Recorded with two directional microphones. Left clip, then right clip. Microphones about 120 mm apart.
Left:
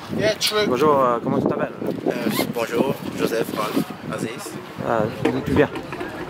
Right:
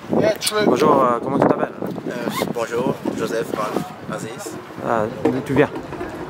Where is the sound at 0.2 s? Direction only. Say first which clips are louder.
Even; 20° left (ahead or behind).